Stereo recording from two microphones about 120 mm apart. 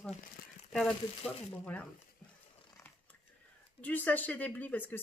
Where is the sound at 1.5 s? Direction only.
10° left (ahead or behind).